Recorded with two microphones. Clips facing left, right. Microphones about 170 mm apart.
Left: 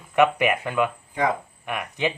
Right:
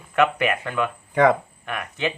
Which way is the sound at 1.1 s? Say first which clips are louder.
Right 9 dB; 75° right (ahead or behind).